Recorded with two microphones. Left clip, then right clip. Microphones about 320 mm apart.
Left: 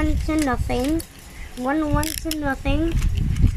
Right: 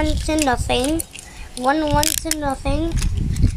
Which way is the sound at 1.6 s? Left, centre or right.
Right.